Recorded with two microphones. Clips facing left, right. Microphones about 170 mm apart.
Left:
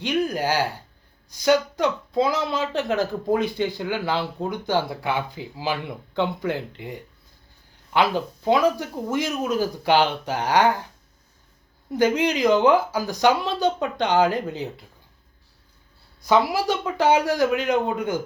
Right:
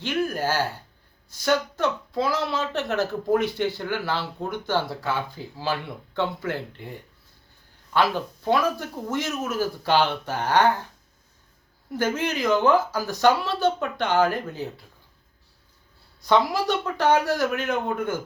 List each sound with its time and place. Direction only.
0.0 s speech: 15° left (ahead or behind)
8.4 s speech: 15° left (ahead or behind)
11.9 s speech: 15° left (ahead or behind)
16.2 s speech: 10° left (ahead or behind)